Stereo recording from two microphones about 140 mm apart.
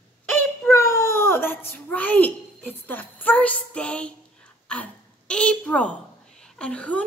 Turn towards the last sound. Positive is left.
turn(degrees=10)  # may be behind; listen again after turning